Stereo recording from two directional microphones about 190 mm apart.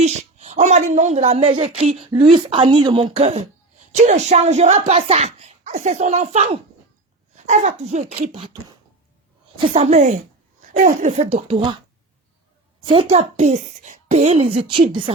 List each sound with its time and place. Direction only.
0.0 s a woman's voice: 35° right (ahead or behind)
9.6 s a woman's voice: 30° right (ahead or behind)
12.9 s a woman's voice: 30° right (ahead or behind)